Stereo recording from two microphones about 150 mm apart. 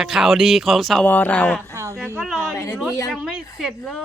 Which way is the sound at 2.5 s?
20° left (ahead or behind).